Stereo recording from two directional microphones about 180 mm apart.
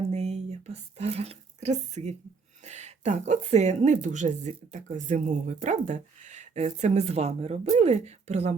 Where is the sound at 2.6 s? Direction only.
40° right (ahead or behind).